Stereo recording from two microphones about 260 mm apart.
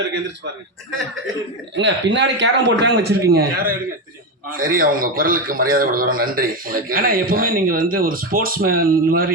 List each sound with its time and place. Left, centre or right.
1.7 s a man's voice: right